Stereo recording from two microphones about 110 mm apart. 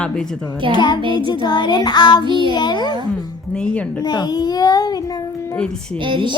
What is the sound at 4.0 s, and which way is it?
A child's voice, 40° left (ahead or behind).